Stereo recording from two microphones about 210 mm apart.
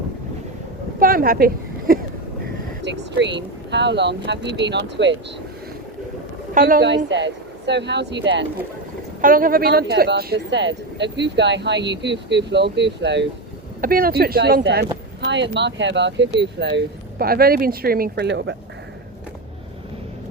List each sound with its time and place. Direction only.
0.9 s a sound: 45° right (ahead or behind)
2.8 s speech: 55° right (ahead or behind)
6.5 s speech: 40° right (ahead or behind)
9.2 s speech: 40° right (ahead or behind)
13.8 s speech: 45° right (ahead or behind)